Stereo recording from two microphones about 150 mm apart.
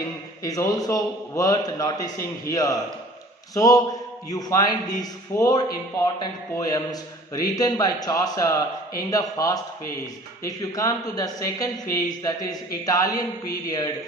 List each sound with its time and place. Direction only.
0.4 s a man's voice: 25° left (ahead or behind)